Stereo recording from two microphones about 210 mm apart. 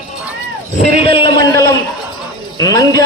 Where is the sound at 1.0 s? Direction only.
25° left (ahead or behind).